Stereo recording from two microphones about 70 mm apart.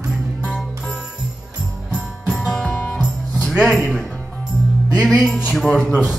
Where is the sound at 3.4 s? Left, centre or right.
Centre.